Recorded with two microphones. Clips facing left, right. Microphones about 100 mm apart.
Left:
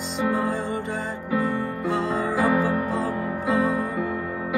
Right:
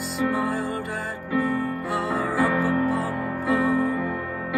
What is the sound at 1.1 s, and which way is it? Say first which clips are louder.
Music: right 1 dB; 20° left (ahead or behind).